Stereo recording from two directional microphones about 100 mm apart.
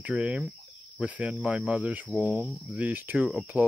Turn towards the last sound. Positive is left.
turn(degrees=-15)  # may be behind; listen again after turning